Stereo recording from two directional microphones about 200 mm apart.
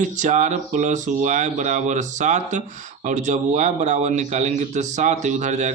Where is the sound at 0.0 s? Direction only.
40° right (ahead or behind).